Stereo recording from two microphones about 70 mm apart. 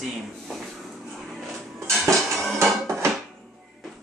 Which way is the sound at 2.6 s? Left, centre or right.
Right.